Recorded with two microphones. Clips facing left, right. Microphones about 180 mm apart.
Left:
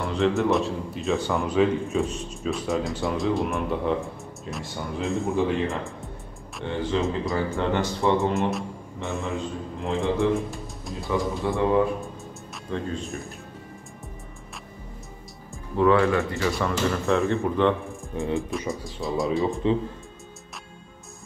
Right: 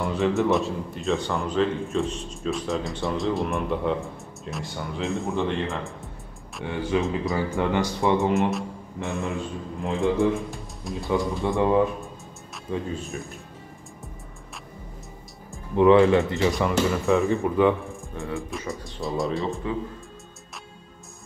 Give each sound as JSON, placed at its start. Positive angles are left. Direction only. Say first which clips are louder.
{"t": 0.0, "sound": "speech", "louder": "even", "side_deg": 0}
{"t": 8.5, "sound": "a sound", "louder": "right 1 dB", "side_deg": 0}
{"t": 9.8, "sound": "a man's voice", "louder": "right 1 dB", "side_deg": 0}
{"t": 11.4, "sound": "speech", "louder": "right 1 dB", "side_deg": -20}
{"t": 12.7, "sound": "speech", "louder": "even", "side_deg": -5}
{"t": 15.7, "sound": "speech", "louder": "right 4 dB", "side_deg": -20}
{"t": 16.9, "sound": "speech", "louder": "right 1 dB", "side_deg": 0}
{"t": 18.1, "sound": "music", "louder": "left 5 dB", "side_deg": 20}
{"t": 18.7, "sound": "speech", "louder": "left 1 dB", "side_deg": 0}
{"t": 19.5, "sound": "speech", "louder": "left 5 dB", "side_deg": 25}